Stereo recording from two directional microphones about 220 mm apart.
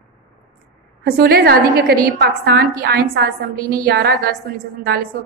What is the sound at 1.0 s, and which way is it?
A woman's voice, 45° right (ahead or behind).